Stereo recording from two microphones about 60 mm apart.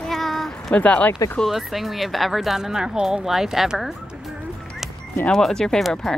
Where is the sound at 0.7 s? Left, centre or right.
Left.